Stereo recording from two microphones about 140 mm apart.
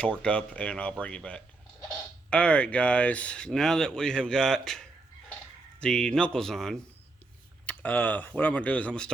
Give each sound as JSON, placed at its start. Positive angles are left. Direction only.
{"t": 0.0, "sound": "speech", "side_deg": 10}